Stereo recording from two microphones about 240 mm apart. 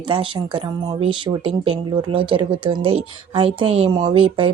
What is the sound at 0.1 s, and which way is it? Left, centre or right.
Speech, right.